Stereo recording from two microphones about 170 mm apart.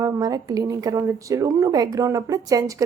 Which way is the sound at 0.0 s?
20° right (ahead or behind).